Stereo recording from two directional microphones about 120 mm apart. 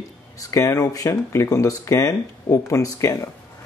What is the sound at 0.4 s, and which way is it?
Speech, 25° left (ahead or behind).